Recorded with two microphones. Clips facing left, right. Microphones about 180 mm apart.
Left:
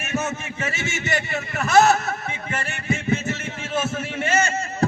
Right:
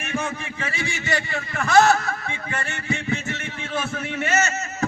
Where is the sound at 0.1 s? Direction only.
25° left (ahead or behind).